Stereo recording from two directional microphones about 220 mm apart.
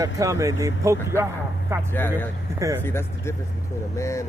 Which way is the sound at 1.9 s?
10° left (ahead or behind).